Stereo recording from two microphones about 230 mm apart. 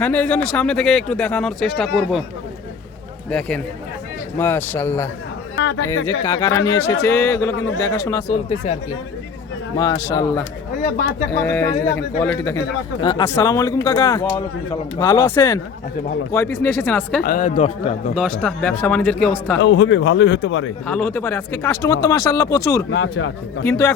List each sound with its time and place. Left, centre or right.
0.0 s speech: centre
3.2 s speech: centre
5.6 s speech: left
6.2 s speech: centre
8.3 s speech: left
9.7 s speech: centre
17.2 s a man's voice: left
18.1 s speech: centre
19.5 s a man's voice: left
20.8 s speech: centre
22.9 s speech: left
23.6 s speech: centre